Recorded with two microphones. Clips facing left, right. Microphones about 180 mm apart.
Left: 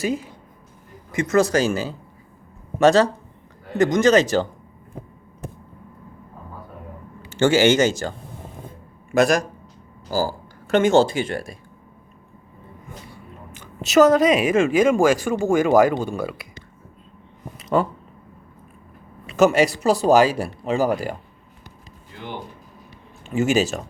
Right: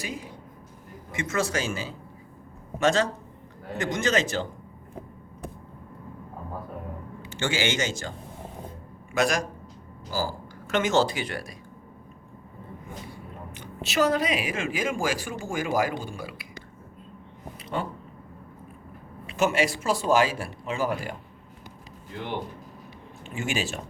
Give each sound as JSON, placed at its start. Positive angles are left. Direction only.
{"t": 0.0, "sound": "speech", "side_deg": 45}
{"t": 7.3, "sound": "speech", "side_deg": 40}
{"t": 9.1, "sound": "speech", "side_deg": 40}
{"t": 10.7, "sound": "speech", "side_deg": 30}
{"t": 13.8, "sound": "speech", "side_deg": 45}
{"t": 17.6, "sound": "a sound", "side_deg": 45}
{"t": 19.3, "sound": "speech", "side_deg": 40}
{"t": 23.2, "sound": "speech", "side_deg": 40}